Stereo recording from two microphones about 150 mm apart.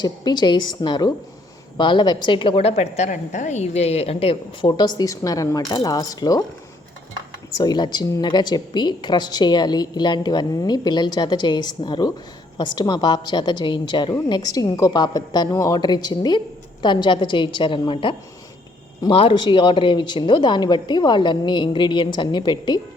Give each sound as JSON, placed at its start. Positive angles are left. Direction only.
{"t": 0.0, "sound": "a woman's voice", "side_deg": 30}
{"t": 7.5, "sound": "a woman's voice", "side_deg": 30}